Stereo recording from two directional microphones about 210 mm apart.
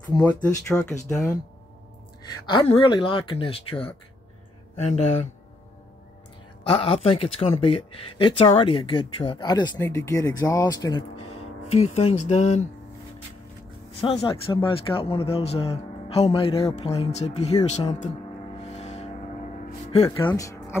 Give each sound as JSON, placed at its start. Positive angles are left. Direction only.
{"t": 0.0, "sound": "speech", "side_deg": 15}
{"t": 2.4, "sound": "speech", "side_deg": 25}
{"t": 4.7, "sound": "speech", "side_deg": 30}
{"t": 6.6, "sound": "speech", "side_deg": 25}
{"t": 11.3, "sound": "speech", "side_deg": 30}
{"t": 14.0, "sound": "speech", "side_deg": 25}
{"t": 18.6, "sound": "music", "side_deg": 30}
{"t": 20.2, "sound": "speech", "side_deg": 15}